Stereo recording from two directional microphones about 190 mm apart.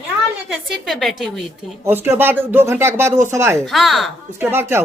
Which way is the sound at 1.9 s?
10° right (ahead or behind).